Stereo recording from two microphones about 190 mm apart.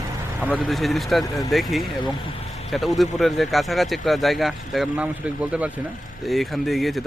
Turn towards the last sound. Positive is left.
turn(degrees=0)  # may be behind; listen again after turning